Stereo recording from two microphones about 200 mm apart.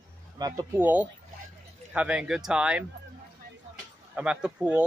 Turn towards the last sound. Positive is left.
turn(degrees=-5)  # may be behind; listen again after turning